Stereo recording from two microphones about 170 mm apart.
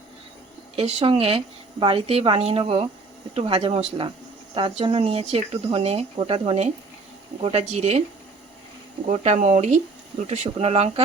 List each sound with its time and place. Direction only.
0.8 s speech: 35° right (ahead or behind)
9.0 s speech: 40° right (ahead or behind)